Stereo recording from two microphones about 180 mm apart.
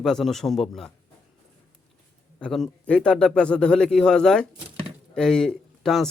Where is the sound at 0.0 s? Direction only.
Centre (ahead or behind).